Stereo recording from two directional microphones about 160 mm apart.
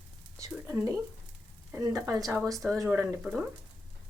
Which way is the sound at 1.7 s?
20° right (ahead or behind).